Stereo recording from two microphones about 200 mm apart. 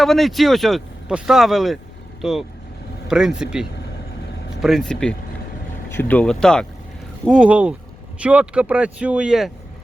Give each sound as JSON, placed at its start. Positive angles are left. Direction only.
{"t": 0.0, "sound": "speech", "side_deg": 0}